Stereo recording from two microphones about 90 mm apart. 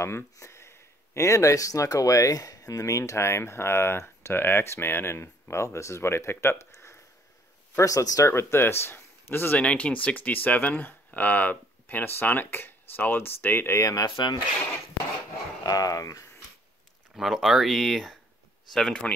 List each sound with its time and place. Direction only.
0.0 s speech: 30° left (ahead or behind)
14.1 s speech: 60° left (ahead or behind)
15.6 s speech: 45° left (ahead or behind)
17.1 s speech: centre (ahead or behind)